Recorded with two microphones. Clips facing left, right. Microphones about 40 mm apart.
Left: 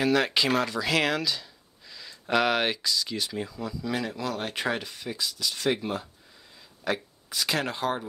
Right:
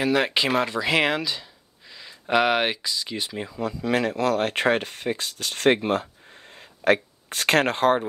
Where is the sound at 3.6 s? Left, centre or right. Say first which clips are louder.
Right 9 dB; right.